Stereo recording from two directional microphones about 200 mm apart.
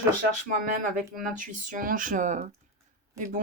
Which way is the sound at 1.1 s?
40° right (ahead or behind).